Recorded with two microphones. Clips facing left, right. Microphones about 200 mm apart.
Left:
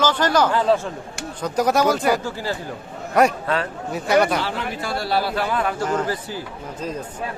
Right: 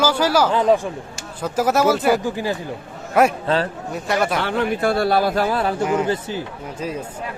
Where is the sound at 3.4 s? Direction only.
30° right (ahead or behind).